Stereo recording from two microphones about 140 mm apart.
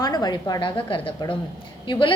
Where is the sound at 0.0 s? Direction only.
30° left (ahead or behind).